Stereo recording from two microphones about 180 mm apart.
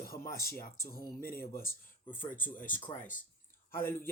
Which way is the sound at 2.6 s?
45° left (ahead or behind).